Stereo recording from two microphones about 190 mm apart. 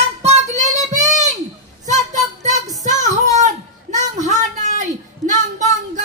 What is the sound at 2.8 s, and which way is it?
Child singing, 40° right (ahead or behind).